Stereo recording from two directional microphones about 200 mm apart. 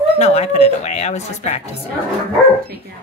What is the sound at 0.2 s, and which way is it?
Speech, 35° left (ahead or behind).